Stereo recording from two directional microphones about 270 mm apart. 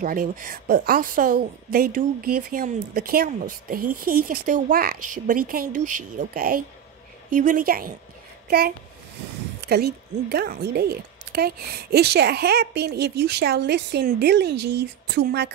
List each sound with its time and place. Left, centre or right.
0.0 s a woman's voice: right